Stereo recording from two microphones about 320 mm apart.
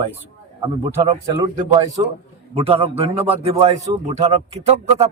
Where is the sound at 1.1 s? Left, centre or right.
Centre.